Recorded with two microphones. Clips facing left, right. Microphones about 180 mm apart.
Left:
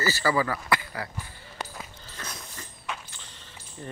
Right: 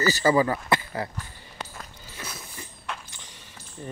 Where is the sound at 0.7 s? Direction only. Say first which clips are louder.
Right 3 dB; 25° right (ahead or behind).